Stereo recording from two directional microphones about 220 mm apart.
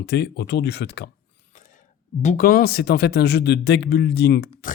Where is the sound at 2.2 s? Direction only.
40° left (ahead or behind).